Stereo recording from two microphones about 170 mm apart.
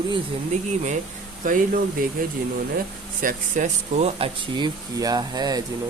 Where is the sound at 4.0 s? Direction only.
30° right (ahead or behind).